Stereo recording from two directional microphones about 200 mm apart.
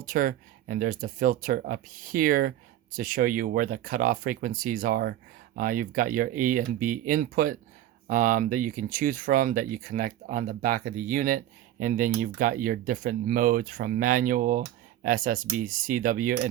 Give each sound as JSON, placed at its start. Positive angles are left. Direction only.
{"t": 0.0, "sound": "speech", "side_deg": -45}